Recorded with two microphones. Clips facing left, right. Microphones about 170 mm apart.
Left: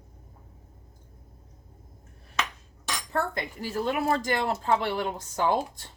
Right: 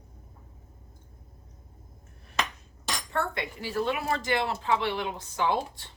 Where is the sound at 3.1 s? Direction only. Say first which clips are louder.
Left 2 dB; 40° left (ahead or behind).